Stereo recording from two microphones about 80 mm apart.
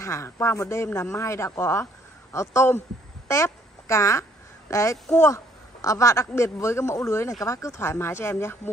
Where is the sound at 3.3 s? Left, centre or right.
Left.